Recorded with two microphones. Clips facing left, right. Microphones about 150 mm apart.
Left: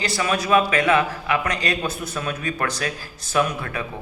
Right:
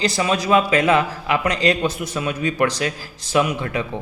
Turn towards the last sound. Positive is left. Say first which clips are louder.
# right 3 dB
turn(degrees=-20)  # may be behind; listen again after turning